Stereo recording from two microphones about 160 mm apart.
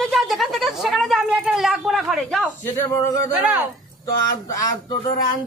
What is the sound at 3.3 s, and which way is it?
Speech, 5° right (ahead or behind).